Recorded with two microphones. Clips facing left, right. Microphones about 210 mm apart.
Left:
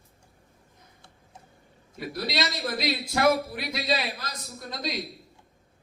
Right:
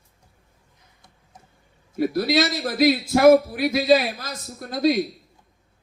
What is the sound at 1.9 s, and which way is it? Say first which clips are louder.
Speech: right 11 dB; 50° right (ahead or behind).